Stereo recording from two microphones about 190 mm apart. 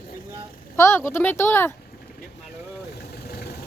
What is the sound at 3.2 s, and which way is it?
Vehicle, 55° left (ahead or behind).